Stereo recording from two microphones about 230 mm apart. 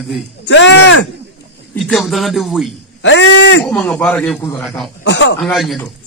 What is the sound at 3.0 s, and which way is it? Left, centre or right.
Speech, left.